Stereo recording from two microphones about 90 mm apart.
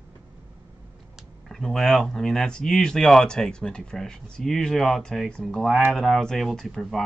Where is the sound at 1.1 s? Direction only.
5° left (ahead or behind).